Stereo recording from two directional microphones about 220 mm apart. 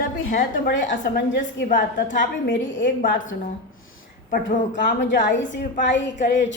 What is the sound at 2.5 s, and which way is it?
Speech, 60° left (ahead or behind).